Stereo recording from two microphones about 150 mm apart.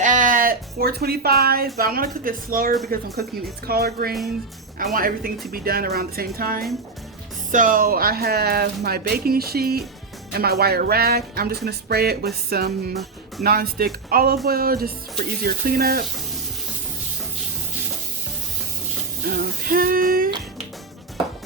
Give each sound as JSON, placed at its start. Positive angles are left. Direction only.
{"t": 0.0, "sound": "speech", "side_deg": -60}
{"t": 2.9, "sound": "speech", "side_deg": -90}
{"t": 4.9, "sound": "a sound", "side_deg": -75}
{"t": 5.5, "sound": "speech", "side_deg": -80}
{"t": 7.5, "sound": "speech", "side_deg": -65}
{"t": 19.3, "sound": "a sound", "side_deg": -75}